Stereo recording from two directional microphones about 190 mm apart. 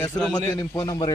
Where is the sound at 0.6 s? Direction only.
20° left (ahead or behind).